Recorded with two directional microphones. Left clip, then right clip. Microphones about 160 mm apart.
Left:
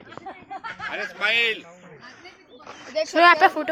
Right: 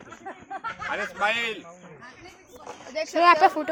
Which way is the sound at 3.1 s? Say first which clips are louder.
Left 2 dB; centre (ahead or behind).